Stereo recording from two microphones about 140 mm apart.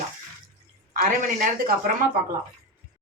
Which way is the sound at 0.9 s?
70° right (ahead or behind).